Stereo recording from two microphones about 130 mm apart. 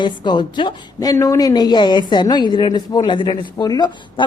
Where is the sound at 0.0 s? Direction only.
35° left (ahead or behind).